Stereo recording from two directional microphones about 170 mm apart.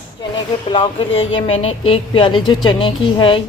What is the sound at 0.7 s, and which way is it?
A woman's voice, 30° left (ahead or behind).